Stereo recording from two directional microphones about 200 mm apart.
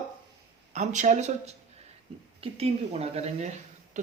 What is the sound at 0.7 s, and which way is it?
Speech, 35° right (ahead or behind).